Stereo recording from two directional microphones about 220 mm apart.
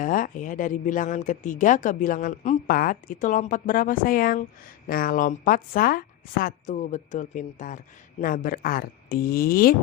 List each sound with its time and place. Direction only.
0.0 s speech: 40° left (ahead or behind)